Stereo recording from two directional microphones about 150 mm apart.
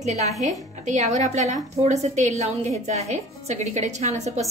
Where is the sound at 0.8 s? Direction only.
50° right (ahead or behind).